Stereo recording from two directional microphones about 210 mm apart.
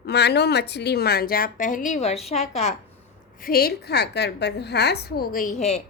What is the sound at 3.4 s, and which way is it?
A woman's voice, 45° left (ahead or behind).